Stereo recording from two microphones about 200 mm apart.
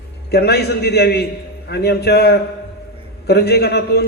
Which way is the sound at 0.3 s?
55° left (ahead or behind).